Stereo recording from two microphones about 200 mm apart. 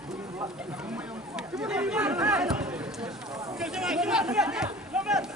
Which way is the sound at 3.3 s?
15° right (ahead or behind).